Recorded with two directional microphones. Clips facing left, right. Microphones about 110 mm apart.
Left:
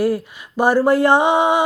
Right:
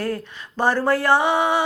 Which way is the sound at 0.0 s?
10° left (ahead or behind).